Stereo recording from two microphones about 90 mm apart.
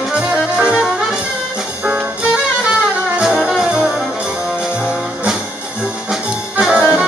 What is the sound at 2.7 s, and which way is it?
Brass instrument, 5° right (ahead or behind).